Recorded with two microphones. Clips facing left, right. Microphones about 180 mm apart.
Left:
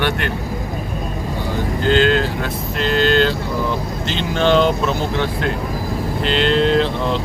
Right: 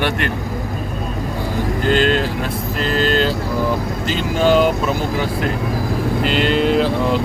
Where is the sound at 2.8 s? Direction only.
Centre (ahead or behind).